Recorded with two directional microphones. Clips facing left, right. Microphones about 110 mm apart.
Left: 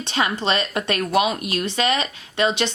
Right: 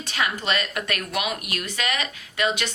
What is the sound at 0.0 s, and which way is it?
Speech, 25° left (ahead or behind).